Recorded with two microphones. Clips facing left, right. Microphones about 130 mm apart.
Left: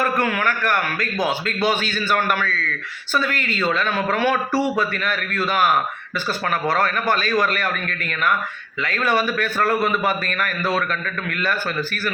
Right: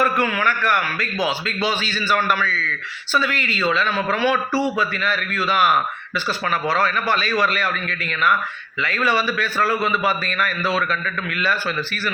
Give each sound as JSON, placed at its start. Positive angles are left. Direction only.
{"t": 0.0, "sound": "a man's voice", "side_deg": 50}